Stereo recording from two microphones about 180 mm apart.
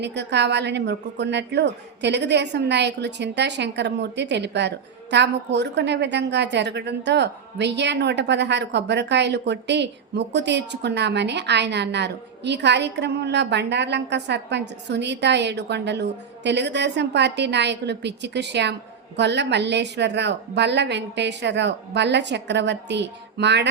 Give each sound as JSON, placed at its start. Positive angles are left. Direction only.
{"t": 0.0, "sound": "a woman's voice", "side_deg": -70}